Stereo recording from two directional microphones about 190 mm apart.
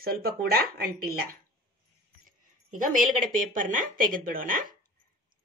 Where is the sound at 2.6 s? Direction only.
45° right (ahead or behind).